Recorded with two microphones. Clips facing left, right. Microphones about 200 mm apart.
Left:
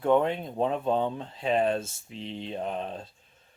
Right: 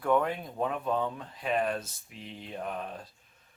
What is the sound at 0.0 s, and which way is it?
Speech, 25° left (ahead or behind).